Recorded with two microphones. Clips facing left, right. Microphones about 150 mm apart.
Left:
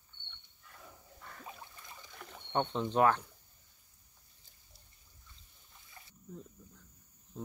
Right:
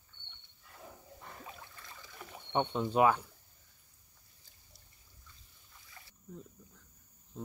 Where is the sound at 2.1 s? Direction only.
10° right (ahead or behind).